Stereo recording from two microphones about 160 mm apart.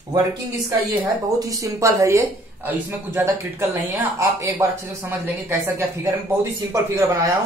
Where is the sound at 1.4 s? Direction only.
20° right (ahead or behind).